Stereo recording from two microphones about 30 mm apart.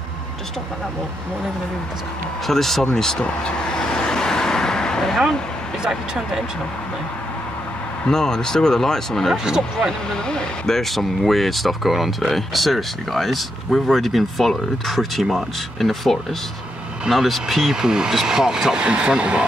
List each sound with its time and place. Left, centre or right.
2.4 s speech: centre
2.8 s speech: centre
3.3 s vehicle: left
5.9 s speech: centre
8.1 s speech: centre
10.7 s speech: centre
17.7 s speech: right
18.8 s speech: right